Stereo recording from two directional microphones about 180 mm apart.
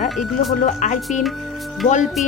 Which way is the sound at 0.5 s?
50° left (ahead or behind).